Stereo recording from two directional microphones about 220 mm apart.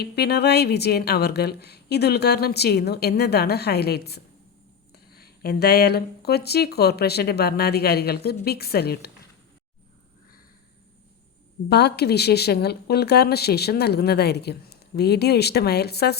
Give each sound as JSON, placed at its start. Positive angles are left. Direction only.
{"t": 0.0, "sound": "speech", "side_deg": 45}
{"t": 11.7, "sound": "speech", "side_deg": 50}